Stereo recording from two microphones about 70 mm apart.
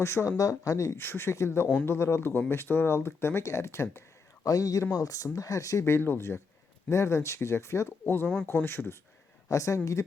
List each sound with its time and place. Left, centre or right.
0.0 s speech: left
0.9 s speech: left
4.4 s speech: left
5.8 s speech: left
9.5 s speech: left